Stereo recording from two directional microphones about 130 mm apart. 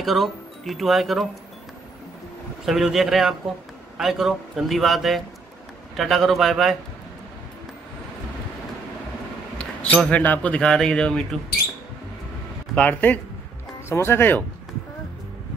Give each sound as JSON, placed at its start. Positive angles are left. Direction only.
{"t": 0.0, "sound": "speech", "side_deg": 0}
{"t": 2.6, "sound": "a man's voice", "side_deg": 0}
{"t": 9.6, "sound": "speech", "side_deg": 10}
{"t": 12.7, "sound": "speech", "side_deg": 10}